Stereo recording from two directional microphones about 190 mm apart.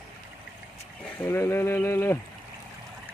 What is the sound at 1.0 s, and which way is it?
Speech, 10° left (ahead or behind).